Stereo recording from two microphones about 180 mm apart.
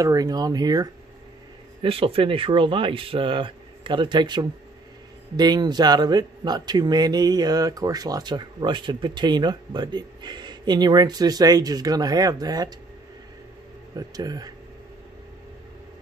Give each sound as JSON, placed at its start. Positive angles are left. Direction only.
{"t": 0.0, "sound": "a man's voice", "side_deg": -20}
{"t": 1.8, "sound": "a man's voice", "side_deg": -30}
{"t": 13.9, "sound": "a man's voice", "side_deg": -20}